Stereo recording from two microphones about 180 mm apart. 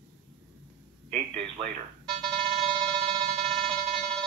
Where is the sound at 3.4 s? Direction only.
5° left (ahead or behind).